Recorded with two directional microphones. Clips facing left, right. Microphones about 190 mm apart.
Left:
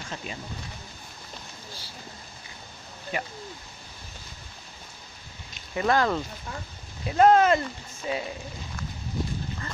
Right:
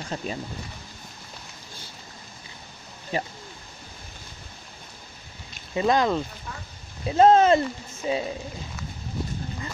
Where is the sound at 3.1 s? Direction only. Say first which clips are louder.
Right 4 dB; 30° right (ahead or behind).